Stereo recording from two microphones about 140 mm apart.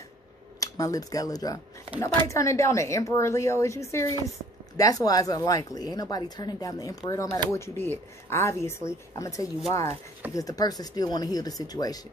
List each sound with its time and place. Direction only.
0.6 s speech: 25° left (ahead or behind)